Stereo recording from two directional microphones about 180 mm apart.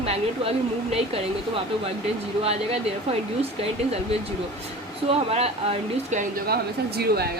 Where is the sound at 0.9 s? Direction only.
30° right (ahead or behind).